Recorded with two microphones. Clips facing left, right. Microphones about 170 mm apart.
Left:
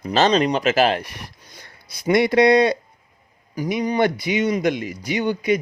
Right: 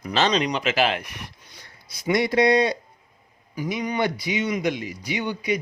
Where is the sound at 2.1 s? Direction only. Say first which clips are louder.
Left 4 dB; 65° left (ahead or behind).